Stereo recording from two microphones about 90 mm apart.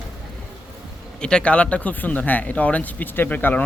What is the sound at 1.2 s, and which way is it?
A man's voice, 10° left (ahead or behind).